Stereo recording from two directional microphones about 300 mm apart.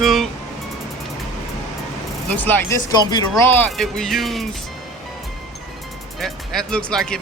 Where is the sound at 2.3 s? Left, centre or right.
Centre.